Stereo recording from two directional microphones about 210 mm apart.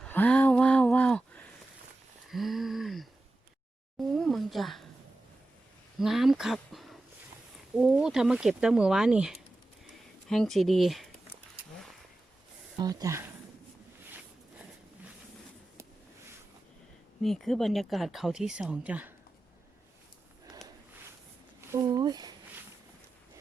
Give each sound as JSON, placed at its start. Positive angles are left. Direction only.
{"t": 0.0, "sound": "a sound", "side_deg": 5}
{"t": 2.3, "sound": "a sound", "side_deg": 0}
{"t": 6.0, "sound": "speech", "side_deg": 0}
{"t": 12.8, "sound": "speech", "side_deg": -15}
{"t": 17.2, "sound": "speech", "side_deg": 0}
{"t": 21.7, "sound": "speech", "side_deg": -15}